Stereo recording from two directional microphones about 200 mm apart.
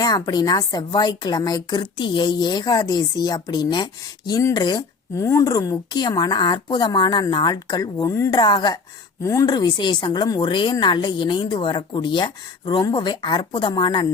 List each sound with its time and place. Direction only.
0.0 s speech: 20° left (ahead or behind)